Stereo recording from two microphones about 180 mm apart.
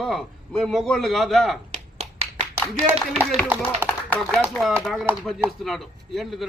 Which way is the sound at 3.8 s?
10° left (ahead or behind).